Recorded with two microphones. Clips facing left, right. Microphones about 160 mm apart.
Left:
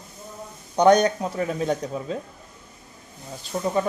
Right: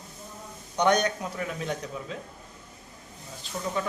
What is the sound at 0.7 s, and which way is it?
Speech, 35° left (ahead or behind).